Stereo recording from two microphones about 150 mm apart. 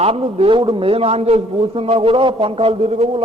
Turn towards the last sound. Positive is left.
turn(degrees=-40)  # may be behind; listen again after turning